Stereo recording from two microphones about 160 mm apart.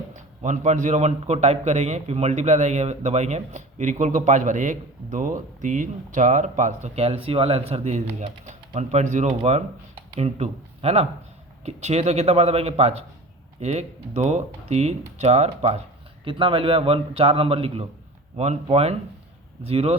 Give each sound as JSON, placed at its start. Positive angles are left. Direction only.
{"t": 0.4, "sound": "a man's voice", "side_deg": -50}